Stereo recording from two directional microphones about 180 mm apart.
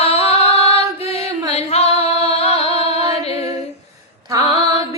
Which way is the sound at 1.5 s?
35° left (ahead or behind).